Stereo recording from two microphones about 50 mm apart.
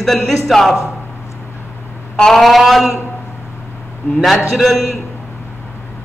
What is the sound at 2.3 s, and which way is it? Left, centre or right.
Speech, centre.